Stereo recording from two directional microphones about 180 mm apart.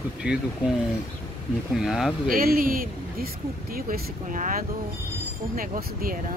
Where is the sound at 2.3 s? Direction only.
50° right (ahead or behind).